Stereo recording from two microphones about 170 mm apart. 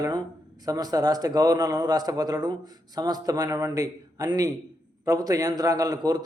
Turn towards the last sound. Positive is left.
turn(degrees=-25)  # may be behind; listen again after turning